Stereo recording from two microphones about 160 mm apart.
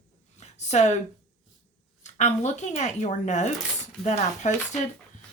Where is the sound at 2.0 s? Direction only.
45° left (ahead or behind).